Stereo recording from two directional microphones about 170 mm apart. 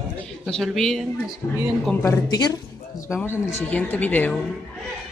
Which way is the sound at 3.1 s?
10° left (ahead or behind).